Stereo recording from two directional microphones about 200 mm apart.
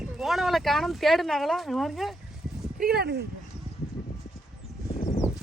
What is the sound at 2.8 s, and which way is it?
Speech, 50° right (ahead or behind).